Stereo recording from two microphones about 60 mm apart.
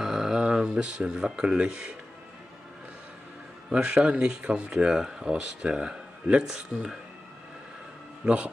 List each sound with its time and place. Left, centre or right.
0.0 s speech: centre
3.7 s speech: centre